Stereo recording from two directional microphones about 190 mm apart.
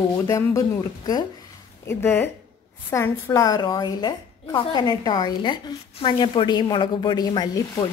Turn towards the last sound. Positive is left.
turn(degrees=20)  # may be behind; listen again after turning